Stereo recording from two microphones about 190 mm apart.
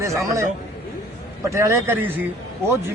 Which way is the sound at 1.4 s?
15° right (ahead or behind).